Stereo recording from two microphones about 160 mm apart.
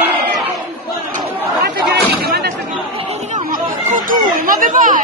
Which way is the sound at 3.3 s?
60° right (ahead or behind).